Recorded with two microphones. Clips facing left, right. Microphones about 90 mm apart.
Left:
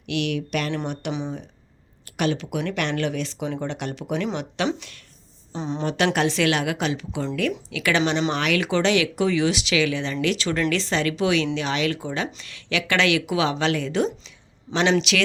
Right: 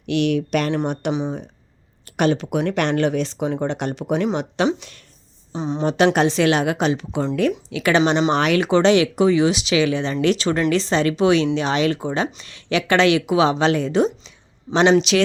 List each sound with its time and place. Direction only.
0.0 s speech: 35° right (ahead or behind)
5.5 s a woman's voice: 10° right (ahead or behind)
5.8 s speech: 25° right (ahead or behind)